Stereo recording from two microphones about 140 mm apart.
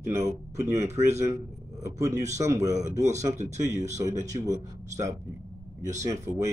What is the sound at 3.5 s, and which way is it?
A man's voice, 20° right (ahead or behind).